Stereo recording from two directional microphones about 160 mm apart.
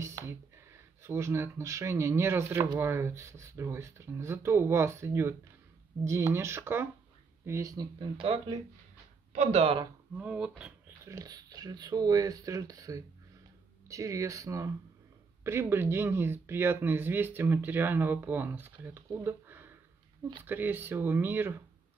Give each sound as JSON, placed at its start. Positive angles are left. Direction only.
{"t": 0.0, "sound": "a sound", "side_deg": -15}
{"t": 1.0, "sound": "speech", "side_deg": -15}
{"t": 9.3, "sound": "speech", "side_deg": -45}
{"t": 10.1, "sound": "speech", "side_deg": -5}
{"t": 11.1, "sound": "speech", "side_deg": -20}